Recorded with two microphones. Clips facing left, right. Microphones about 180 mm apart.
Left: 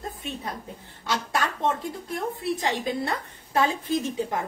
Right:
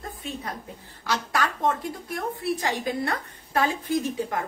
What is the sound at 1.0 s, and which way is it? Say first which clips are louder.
A woman's voice: right 1 dB; 25° left (ahead or behind).